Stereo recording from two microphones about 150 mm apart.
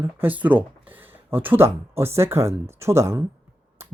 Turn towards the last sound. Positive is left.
turn(degrees=-20)  # may be behind; listen again after turning